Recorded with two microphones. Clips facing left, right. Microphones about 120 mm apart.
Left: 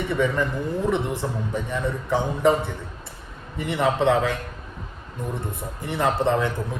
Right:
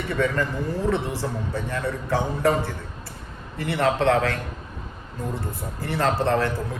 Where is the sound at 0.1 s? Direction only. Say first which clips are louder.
Even; 15° left (ahead or behind).